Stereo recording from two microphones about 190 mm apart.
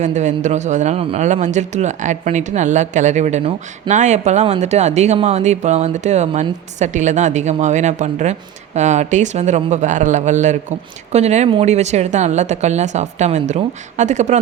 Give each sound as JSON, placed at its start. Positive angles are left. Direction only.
{"t": 0.0, "sound": "a man's voice", "side_deg": -40}